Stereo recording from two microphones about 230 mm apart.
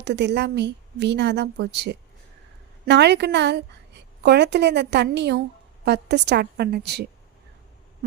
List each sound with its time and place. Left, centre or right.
0.0 s a woman's voice: right